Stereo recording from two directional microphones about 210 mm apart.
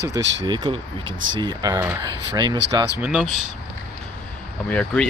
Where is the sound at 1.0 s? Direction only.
65° right (ahead or behind).